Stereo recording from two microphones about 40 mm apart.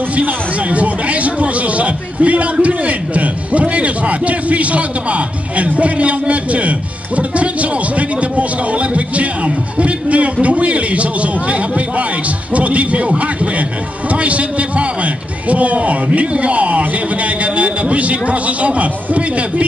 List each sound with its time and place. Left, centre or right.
0.1 s speech: right
7.9 s speech: right
12.5 s speech: right
14.1 s speech: right